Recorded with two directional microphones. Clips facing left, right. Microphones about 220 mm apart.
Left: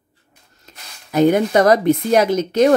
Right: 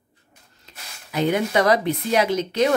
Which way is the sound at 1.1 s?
45° left (ahead or behind).